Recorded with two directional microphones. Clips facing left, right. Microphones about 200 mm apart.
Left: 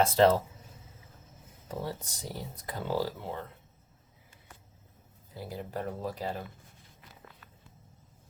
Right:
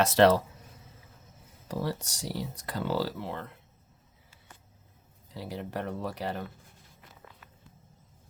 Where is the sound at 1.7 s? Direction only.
80° right.